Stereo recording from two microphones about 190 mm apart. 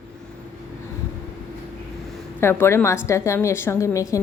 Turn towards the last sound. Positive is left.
turn(degrees=15)  # may be behind; listen again after turning